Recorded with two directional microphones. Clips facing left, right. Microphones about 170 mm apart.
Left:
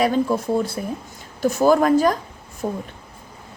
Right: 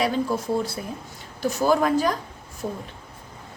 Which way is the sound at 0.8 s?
45° left (ahead or behind).